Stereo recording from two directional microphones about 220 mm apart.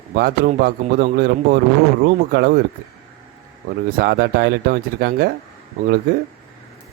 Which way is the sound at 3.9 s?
45° right (ahead or behind).